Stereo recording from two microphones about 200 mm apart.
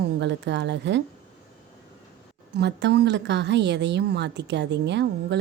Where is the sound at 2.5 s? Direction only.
60° right (ahead or behind).